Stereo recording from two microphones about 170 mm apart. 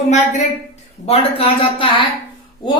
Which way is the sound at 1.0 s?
35° left (ahead or behind).